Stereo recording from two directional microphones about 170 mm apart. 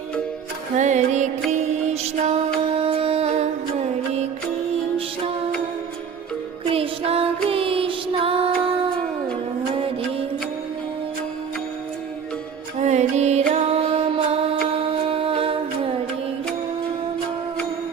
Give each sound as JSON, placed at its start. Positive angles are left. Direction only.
{"t": 0.8, "sound": "music", "side_deg": -45}
{"t": 6.7, "sound": "music", "side_deg": -35}
{"t": 9.8, "sound": "music", "side_deg": -35}
{"t": 12.8, "sound": "music", "side_deg": -45}